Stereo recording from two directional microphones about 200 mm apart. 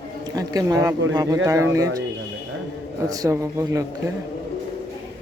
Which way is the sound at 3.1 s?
20° right (ahead or behind).